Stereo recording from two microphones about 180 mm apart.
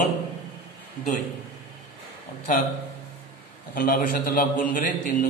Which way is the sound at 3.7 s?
50° left (ahead or behind).